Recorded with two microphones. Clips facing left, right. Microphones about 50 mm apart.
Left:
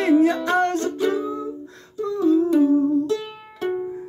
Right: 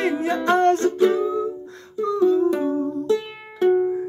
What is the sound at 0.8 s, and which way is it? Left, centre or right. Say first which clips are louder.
Music: right 4 dB; right.